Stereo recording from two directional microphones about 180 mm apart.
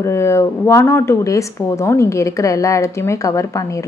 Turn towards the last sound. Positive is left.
turn(degrees=15)  # may be behind; listen again after turning